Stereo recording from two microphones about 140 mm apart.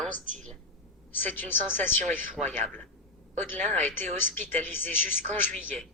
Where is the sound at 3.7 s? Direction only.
15° left (ahead or behind).